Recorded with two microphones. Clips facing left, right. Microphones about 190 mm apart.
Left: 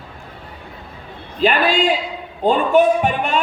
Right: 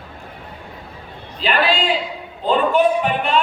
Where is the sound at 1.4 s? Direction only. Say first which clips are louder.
Left 3 dB; 45° left (ahead or behind).